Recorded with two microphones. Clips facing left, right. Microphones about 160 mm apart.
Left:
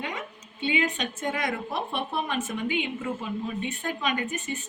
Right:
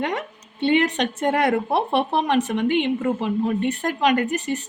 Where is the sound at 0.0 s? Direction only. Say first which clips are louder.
Right 9 dB; 75° right (ahead or behind).